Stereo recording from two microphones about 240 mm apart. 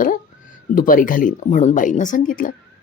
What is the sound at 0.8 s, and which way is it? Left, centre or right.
A woman's voice, left.